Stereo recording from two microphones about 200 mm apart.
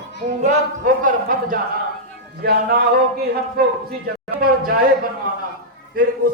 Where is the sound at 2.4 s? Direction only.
50° right (ahead or behind).